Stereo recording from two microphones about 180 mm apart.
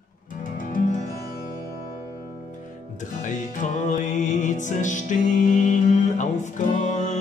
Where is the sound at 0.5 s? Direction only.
50° left (ahead or behind).